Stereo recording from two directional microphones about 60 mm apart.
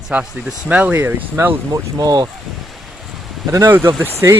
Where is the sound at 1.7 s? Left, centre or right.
Right.